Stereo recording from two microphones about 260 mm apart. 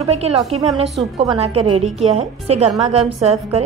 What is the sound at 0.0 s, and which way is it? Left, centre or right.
A woman's voice, right.